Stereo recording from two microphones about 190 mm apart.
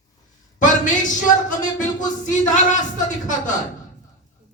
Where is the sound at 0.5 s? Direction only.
40° left (ahead or behind).